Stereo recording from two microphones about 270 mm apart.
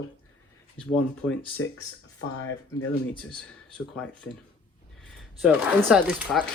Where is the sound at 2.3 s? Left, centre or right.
Left.